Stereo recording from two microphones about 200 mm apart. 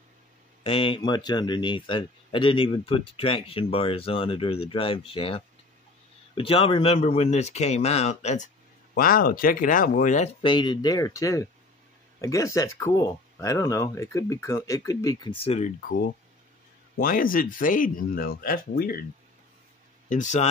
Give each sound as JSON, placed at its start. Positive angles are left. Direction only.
{"t": 0.7, "sound": "speech", "side_deg": 25}
{"t": 8.9, "sound": "speech", "side_deg": 45}
{"t": 10.4, "sound": "speech", "side_deg": 25}
{"t": 17.0, "sound": "speech", "side_deg": 45}
{"t": 20.1, "sound": "speech", "side_deg": 40}